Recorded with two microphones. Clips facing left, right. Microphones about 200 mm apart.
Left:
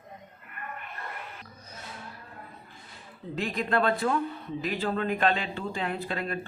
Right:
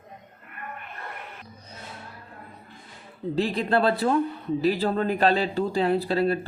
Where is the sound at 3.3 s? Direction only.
35° right (ahead or behind).